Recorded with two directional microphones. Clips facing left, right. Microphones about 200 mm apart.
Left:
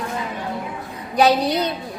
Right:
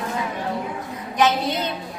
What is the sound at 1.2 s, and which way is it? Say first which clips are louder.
Speech: left 4 dB; 35° left (ahead or behind).